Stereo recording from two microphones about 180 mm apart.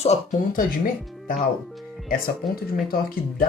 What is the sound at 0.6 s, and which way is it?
Speech, 50° left (ahead or behind).